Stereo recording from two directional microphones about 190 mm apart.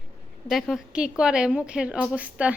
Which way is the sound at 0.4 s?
Centre (ahead or behind).